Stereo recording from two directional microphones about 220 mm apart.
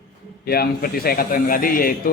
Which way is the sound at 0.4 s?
45° left (ahead or behind).